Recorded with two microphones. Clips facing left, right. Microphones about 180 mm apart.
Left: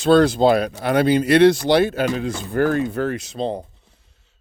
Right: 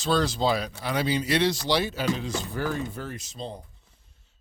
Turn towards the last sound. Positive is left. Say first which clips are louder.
# left 12 dB
turn(degrees=70)  # may be behind; listen again after turning